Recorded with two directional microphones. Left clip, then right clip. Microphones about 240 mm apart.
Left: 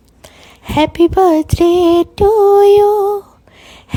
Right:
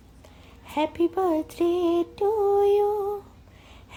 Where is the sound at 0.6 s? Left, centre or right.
Left.